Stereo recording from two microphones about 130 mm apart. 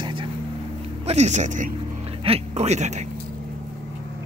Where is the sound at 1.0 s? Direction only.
60° right (ahead or behind).